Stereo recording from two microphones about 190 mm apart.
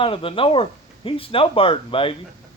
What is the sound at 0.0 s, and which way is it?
Speech, 30° left (ahead or behind).